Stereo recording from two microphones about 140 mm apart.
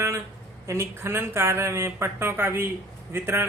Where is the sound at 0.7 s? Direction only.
20° right (ahead or behind).